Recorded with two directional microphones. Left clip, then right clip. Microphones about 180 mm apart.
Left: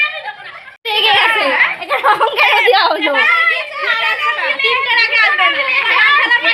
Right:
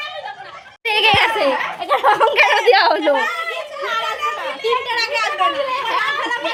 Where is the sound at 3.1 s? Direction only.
15° right (ahead or behind).